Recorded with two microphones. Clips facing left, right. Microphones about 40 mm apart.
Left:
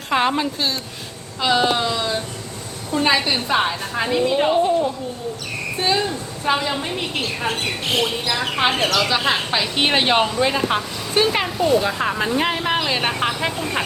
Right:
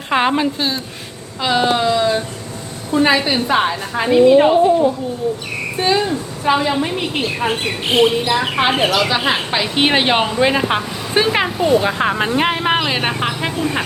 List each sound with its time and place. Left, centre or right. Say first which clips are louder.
0.1 s speech: right 3 dB; centre
5.8 s a woman's voice: right 4 dB; centre
11.8 s speech: right 4 dB; right
12.5 s vehicle: right 4 dB; right
12.8 s speech: right 2 dB; centre